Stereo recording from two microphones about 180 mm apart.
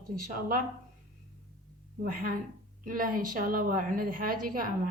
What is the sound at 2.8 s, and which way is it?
A woman's voice, 50° right (ahead or behind).